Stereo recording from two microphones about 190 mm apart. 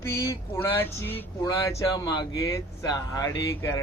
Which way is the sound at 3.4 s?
15° left (ahead or behind).